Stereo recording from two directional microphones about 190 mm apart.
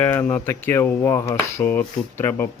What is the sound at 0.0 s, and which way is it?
Speech, 10° left (ahead or behind).